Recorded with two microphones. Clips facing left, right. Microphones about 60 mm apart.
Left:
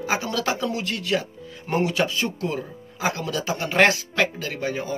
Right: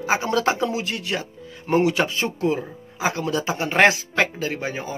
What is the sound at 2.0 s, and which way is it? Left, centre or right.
Speech, right.